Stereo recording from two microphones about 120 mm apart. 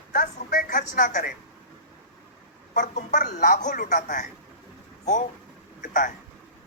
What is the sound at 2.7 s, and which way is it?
A woman's voice, 90° left.